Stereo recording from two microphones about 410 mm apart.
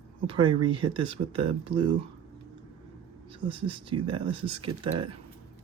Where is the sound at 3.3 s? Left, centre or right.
Centre.